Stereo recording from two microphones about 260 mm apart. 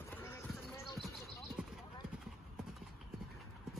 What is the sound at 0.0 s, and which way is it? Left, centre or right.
Basketball bounce, centre.